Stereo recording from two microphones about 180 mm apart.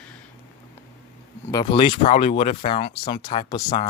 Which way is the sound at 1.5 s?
25° left (ahead or behind).